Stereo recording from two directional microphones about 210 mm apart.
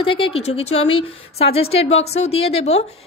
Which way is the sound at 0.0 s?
25° left (ahead or behind).